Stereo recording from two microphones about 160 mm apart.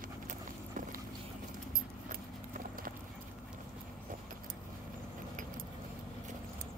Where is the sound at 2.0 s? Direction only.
60° right (ahead or behind).